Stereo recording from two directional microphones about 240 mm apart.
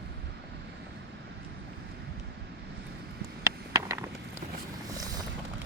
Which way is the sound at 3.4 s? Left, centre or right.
Centre.